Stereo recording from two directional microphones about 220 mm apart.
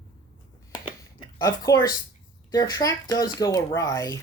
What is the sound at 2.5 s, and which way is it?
Speech, 20° left (ahead or behind).